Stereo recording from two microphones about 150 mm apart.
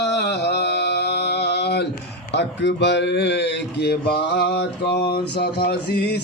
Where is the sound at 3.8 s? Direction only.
90° left.